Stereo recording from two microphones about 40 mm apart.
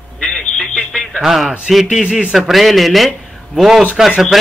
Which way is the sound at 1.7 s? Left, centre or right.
Centre.